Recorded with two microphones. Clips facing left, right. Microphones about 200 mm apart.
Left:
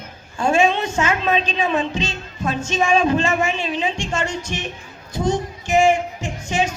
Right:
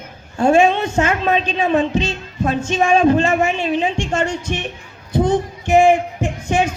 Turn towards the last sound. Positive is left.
turn(degrees=-55)  # may be behind; listen again after turning